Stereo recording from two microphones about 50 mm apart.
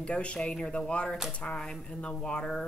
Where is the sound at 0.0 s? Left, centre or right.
Left.